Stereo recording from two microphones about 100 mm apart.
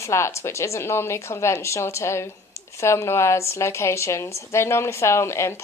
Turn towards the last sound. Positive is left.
turn(degrees=25)  # may be behind; listen again after turning